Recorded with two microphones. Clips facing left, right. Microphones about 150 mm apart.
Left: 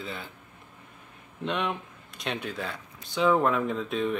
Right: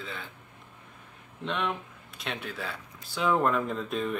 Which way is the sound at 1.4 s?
Centre (ahead or behind).